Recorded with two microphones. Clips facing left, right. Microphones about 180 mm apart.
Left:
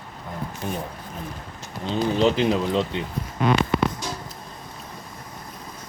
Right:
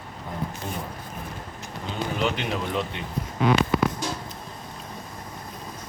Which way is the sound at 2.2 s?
35° left (ahead or behind).